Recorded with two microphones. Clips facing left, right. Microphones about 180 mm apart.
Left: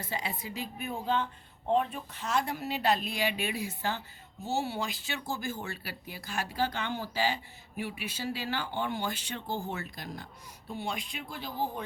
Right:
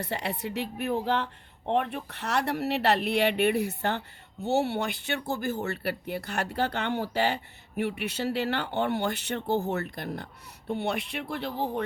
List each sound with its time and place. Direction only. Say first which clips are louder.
0.0 s a woman's voice: right 5 dB; 65° right (ahead or behind)
9.7 s a woman's voice: right 7 dB; 55° right (ahead or behind)